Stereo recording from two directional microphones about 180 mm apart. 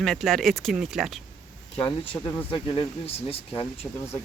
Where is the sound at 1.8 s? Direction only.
25° left (ahead or behind).